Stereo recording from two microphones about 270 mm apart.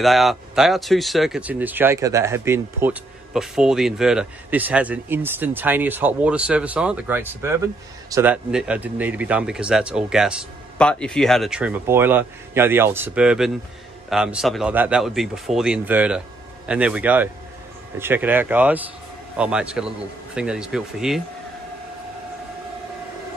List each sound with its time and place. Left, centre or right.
0.0 s speech: centre